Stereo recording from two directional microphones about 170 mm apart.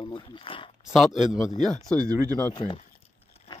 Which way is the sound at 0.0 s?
30° left (ahead or behind).